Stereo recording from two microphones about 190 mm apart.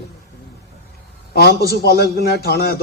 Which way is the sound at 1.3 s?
55° left (ahead or behind).